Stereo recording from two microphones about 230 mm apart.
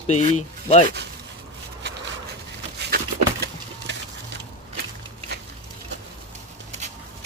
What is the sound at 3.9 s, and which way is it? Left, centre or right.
Printer, right.